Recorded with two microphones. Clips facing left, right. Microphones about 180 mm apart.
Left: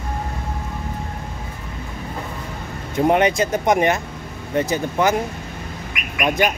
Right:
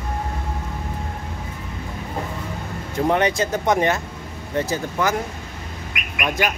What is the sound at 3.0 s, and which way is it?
Speech, 20° left (ahead or behind).